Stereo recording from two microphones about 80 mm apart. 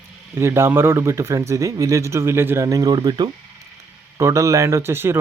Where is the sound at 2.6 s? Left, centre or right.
Right.